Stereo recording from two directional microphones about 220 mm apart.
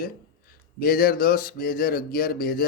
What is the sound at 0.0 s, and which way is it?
Speech, 40° left (ahead or behind).